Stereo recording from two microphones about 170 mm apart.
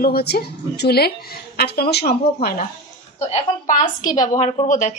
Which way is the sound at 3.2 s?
40° left (ahead or behind).